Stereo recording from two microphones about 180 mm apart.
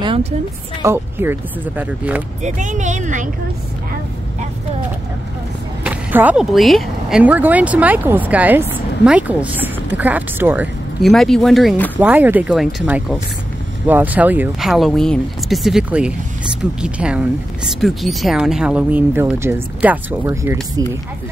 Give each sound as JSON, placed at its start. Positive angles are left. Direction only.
{"t": 0.0, "sound": "a sound", "side_deg": -30}
{"t": 0.8, "sound": "speech", "side_deg": -10}
{"t": 2.4, "sound": "speech", "side_deg": -45}
{"t": 5.9, "sound": "speech", "side_deg": -10}
{"t": 11.0, "sound": "speech", "side_deg": 0}